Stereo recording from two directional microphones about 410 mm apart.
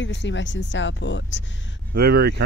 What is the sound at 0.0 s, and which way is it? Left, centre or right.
Speech, left.